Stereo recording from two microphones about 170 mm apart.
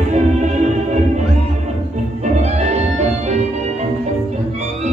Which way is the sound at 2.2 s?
40° right (ahead or behind).